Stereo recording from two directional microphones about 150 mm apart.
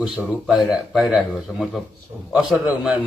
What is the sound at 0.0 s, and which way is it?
A man's voice, 5° right (ahead or behind).